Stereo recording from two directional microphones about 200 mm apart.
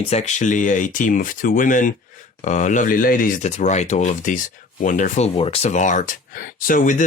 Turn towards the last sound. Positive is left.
turn(degrees=40)  # may be behind; listen again after turning